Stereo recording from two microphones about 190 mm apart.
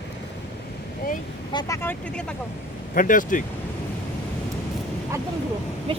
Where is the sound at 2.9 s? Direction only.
45° left (ahead or behind).